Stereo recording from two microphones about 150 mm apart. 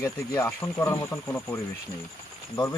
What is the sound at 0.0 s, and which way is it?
Speech, 15° left (ahead or behind).